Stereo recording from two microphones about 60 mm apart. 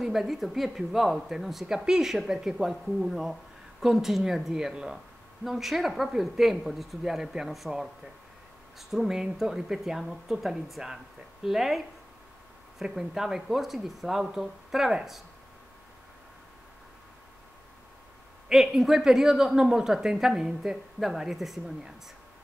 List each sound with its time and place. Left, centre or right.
0.0 s speech: centre
18.5 s speech: centre